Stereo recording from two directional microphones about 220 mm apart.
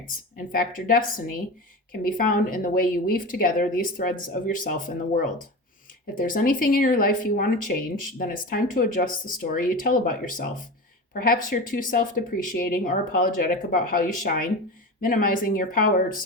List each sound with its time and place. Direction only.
0.3 s speech: 40° left (ahead or behind)